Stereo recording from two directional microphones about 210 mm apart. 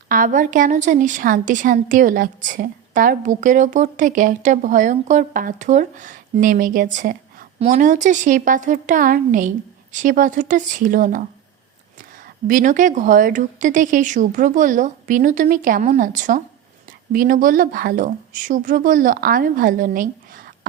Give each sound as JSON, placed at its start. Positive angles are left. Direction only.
{"t": 0.1, "sound": "a woman's voice", "side_deg": -40}
{"t": 12.5, "sound": "a woman's voice", "side_deg": -40}